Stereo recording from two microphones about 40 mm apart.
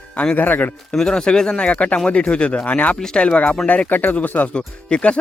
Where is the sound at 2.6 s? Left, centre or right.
Left.